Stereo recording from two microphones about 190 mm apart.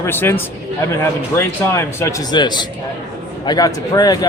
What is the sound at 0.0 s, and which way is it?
Speech, 10° left (ahead or behind).